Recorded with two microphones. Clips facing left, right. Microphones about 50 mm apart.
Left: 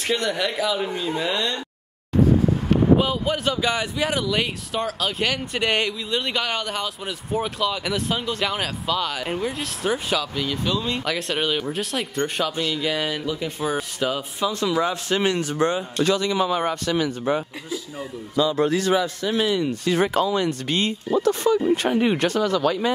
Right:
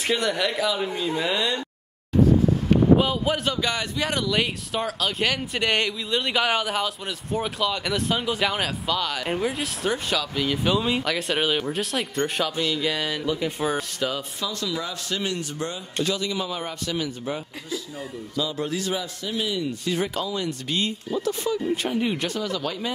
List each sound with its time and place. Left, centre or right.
0.0 s speech: centre
3.0 s speech: centre
10.4 s speech: centre
11.1 s speech: centre
13.9 s speech: centre
14.4 s speech: left
18.4 s speech: left